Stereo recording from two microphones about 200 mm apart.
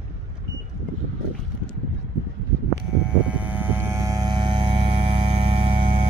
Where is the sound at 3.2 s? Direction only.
10° right (ahead or behind); by 5.7 s 30° right (ahead or behind).